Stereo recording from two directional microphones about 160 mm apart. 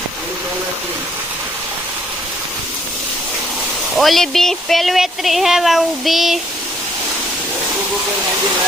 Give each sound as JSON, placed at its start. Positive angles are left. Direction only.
{"t": 3.9, "sound": "speech", "side_deg": 0}